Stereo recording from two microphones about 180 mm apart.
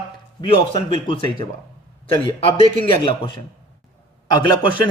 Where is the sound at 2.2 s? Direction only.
30° left (ahead or behind).